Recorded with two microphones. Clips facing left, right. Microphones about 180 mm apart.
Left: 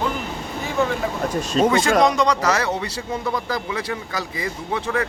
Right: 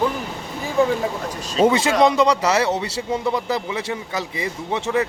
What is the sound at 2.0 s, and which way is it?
Speech, 25° right (ahead or behind).